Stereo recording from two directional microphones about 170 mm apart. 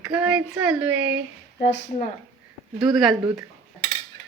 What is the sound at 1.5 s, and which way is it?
Speech, 90° left.